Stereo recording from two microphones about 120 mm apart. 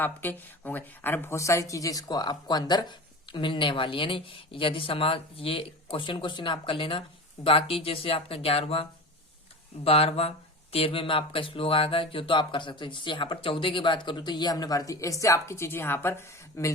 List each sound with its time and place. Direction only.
0.0 s speech: 15° left (ahead or behind)